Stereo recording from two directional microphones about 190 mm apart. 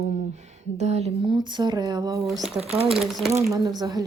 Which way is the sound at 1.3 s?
25° right (ahead or behind).